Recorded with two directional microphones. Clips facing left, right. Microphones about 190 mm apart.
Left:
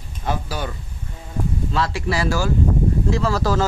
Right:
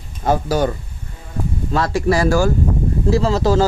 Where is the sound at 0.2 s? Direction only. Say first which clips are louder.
Right 9 dB; 45° right (ahead or behind).